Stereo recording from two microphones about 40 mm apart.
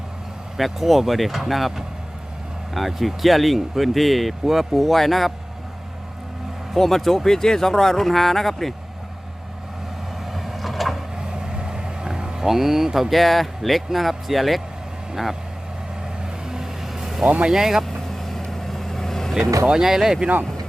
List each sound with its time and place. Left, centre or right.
0.5 s speech: centre
6.7 s speech: centre
10.3 s vehicle: centre
11.2 s vehicle: centre
12.5 s speech: centre
16.5 s vehicle: centre
17.2 s speech: right
17.5 s speech: centre
17.8 s vehicle: centre
19.6 s speech: centre